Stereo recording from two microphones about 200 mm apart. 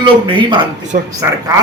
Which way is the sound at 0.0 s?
25° right (ahead or behind).